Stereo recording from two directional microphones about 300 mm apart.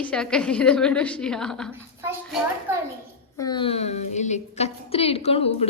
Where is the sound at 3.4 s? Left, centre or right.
Centre.